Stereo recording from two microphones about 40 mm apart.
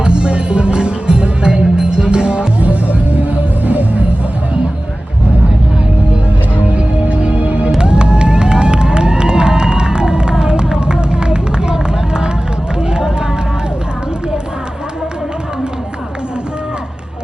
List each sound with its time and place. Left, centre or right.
0.0 s music: right
2.6 s music: right
6.7 s music: right
12.9 s run: centre